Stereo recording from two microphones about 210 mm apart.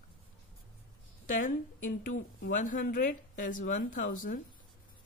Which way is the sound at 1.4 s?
40° left (ahead or behind).